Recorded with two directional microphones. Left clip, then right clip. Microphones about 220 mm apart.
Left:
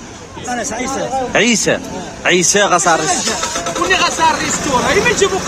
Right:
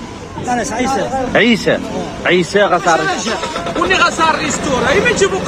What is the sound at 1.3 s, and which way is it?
Speech, 10° left (ahead or behind).